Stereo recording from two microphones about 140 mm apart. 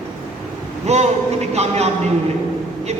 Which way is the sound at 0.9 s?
50° right (ahead or behind).